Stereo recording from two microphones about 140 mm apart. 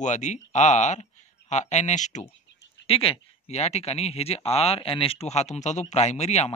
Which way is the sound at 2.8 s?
45° left (ahead or behind).